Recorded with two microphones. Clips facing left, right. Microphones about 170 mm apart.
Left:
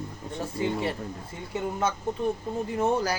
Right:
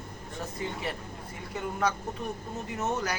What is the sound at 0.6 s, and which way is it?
Speech, 30° left (ahead or behind).